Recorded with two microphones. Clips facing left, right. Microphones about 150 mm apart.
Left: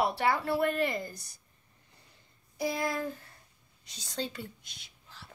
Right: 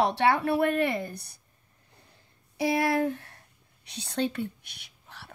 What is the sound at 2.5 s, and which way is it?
Speech, 70° right (ahead or behind).